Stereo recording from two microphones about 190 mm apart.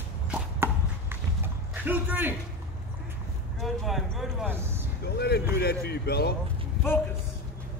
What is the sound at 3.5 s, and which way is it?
Speech, centre (ahead or behind).